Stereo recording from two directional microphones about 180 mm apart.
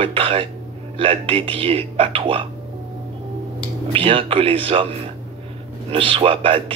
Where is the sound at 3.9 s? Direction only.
30° right (ahead or behind).